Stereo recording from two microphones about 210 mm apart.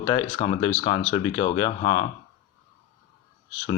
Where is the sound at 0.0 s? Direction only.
20° left (ahead or behind).